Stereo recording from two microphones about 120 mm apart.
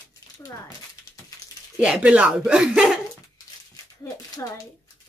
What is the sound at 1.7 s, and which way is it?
Speech, 10° right (ahead or behind).